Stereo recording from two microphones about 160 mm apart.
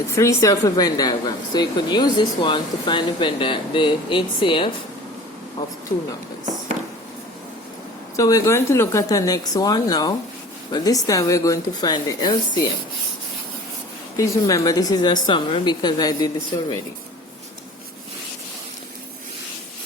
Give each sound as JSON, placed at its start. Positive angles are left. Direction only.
{"t": 0.2, "sound": "a woman's voice", "side_deg": 20}
{"t": 8.1, "sound": "a woman's voice", "side_deg": 20}
{"t": 14.2, "sound": "a woman's voice", "side_deg": 20}